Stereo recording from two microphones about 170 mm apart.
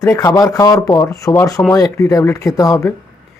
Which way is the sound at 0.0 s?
20° left (ahead or behind).